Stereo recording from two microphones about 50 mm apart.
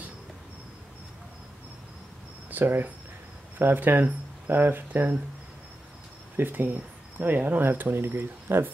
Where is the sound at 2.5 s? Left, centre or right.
Right.